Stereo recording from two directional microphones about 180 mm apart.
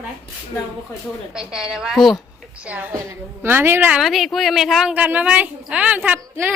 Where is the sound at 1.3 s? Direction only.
5° right (ahead or behind).